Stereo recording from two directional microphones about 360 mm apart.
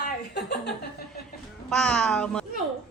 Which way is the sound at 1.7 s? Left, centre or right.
Centre.